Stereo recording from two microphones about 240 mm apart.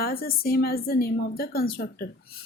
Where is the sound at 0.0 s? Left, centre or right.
Left.